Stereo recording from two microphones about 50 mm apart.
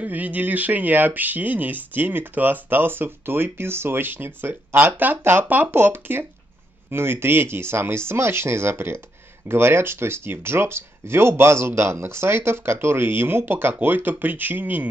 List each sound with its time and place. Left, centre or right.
0.0 s speech: right
13.7 s speech: right